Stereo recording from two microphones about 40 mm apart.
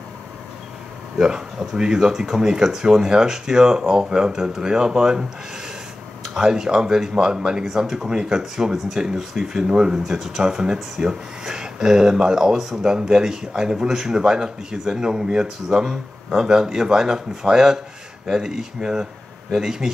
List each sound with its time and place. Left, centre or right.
1.1 s speech: centre
6.3 s speech: centre